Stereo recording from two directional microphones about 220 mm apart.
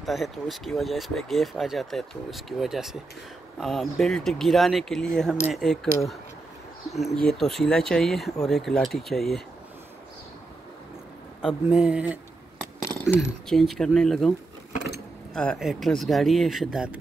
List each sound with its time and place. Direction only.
0.0 s speech: centre (ahead or behind)
7.2 s speech: centre (ahead or behind)
11.4 s speech: 5° right (ahead or behind)
12.8 s a sound: 10° left (ahead or behind)
13.5 s speech: centre (ahead or behind)
15.3 s speech: centre (ahead or behind)